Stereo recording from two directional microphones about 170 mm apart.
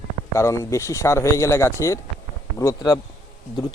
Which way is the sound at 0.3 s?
20° left (ahead or behind).